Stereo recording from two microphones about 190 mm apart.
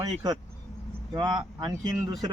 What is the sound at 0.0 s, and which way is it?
Speech, 20° right (ahead or behind).